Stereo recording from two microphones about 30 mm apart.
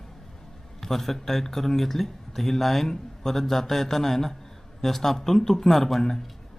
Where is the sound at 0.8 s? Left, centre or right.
Centre.